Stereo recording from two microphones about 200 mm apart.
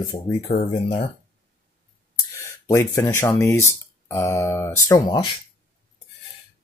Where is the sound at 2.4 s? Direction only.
15° left (ahead or behind).